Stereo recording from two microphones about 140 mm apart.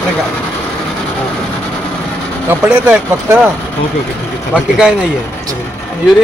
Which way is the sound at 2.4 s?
10° right (ahead or behind).